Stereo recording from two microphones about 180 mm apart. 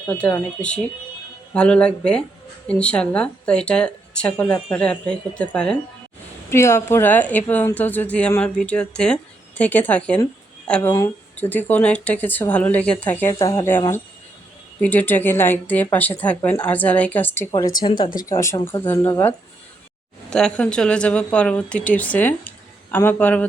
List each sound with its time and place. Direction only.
0.1 s speech: 10° left (ahead or behind)
20.3 s speech: 5° left (ahead or behind)